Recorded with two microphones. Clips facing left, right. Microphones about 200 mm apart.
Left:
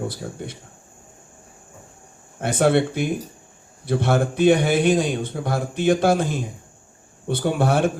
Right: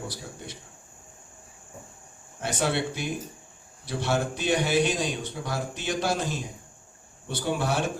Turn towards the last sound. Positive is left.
turn(degrees=55)  # may be behind; listen again after turning